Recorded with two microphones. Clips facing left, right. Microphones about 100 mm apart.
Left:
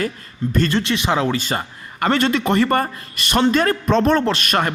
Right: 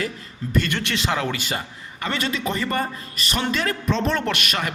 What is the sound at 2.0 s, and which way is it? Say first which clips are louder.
A man's voice: left 8 dB; 55° left (ahead or behind).